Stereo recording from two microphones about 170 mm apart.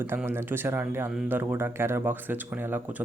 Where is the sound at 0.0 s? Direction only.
15° right (ahead or behind).